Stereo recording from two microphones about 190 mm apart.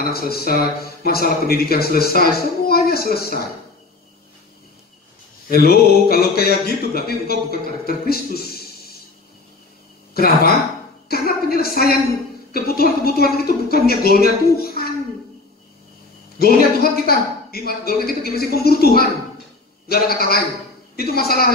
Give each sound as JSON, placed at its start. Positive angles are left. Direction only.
{"t": 0.1, "sound": "speech", "side_deg": 55}
{"t": 5.5, "sound": "speech", "side_deg": 50}
{"t": 10.1, "sound": "a woman's voice", "side_deg": 50}
{"t": 16.3, "sound": "speech", "side_deg": 55}